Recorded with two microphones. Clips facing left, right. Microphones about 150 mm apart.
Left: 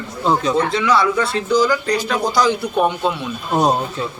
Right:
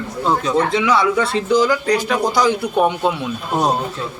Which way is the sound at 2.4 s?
10° right (ahead or behind).